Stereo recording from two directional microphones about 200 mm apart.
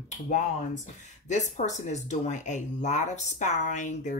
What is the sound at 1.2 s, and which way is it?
Speech, 35° left (ahead or behind).